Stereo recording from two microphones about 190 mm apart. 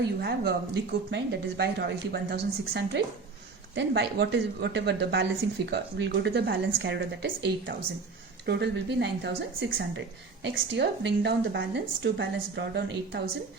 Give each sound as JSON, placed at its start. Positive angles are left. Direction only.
{"t": 0.2, "sound": "a woman's voice", "side_deg": -60}
{"t": 10.4, "sound": "a woman's voice", "side_deg": -65}